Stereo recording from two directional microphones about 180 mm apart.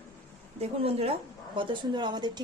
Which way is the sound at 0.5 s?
35° right (ahead or behind).